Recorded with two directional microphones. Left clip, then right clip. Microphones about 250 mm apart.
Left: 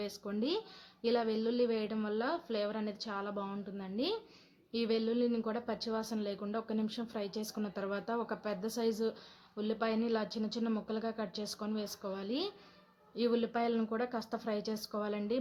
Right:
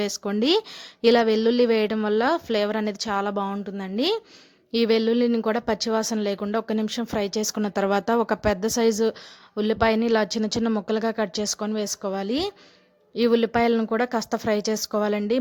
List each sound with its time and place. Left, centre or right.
0.0 s speech: right